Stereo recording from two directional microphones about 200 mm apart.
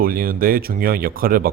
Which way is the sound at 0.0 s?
45° right (ahead or behind).